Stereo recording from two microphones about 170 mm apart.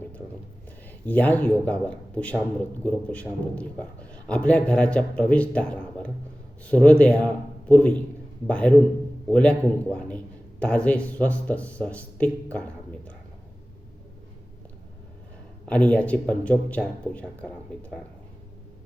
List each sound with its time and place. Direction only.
0.9 s speech: 10° left (ahead or behind)
15.6 s speech: 10° left (ahead or behind)